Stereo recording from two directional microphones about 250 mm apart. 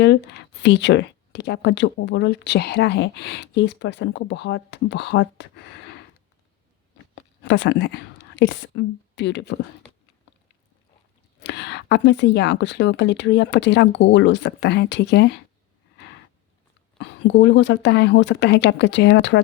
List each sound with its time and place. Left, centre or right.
0.0 s speech: left
7.4 s speech: left
11.3 s speech: left
17.0 s speech: left